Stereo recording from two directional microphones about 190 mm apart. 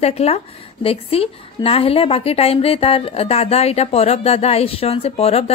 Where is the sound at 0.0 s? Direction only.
35° left (ahead or behind).